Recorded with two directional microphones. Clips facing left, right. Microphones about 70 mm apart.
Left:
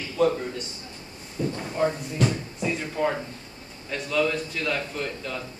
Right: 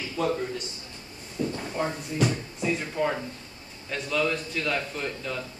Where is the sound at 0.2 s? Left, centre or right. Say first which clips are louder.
Left 5 dB; centre.